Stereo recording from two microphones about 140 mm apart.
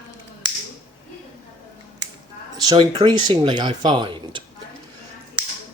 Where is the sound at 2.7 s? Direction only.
30° right (ahead or behind).